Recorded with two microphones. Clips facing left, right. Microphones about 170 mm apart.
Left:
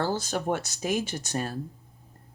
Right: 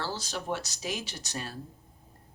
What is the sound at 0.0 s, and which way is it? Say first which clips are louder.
Speech: left 7 dB; 50° left (ahead or behind).